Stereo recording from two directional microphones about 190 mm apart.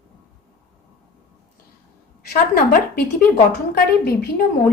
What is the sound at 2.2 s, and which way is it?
A woman's voice, 50° left (ahead or behind).